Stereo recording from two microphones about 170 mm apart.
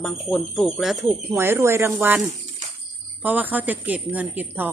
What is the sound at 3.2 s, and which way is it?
Speech, 10° right (ahead or behind).